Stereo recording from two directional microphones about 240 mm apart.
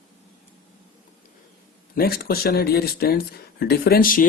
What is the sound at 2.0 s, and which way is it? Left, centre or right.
Speech, left.